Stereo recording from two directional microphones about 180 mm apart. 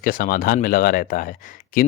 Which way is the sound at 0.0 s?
50° left (ahead or behind).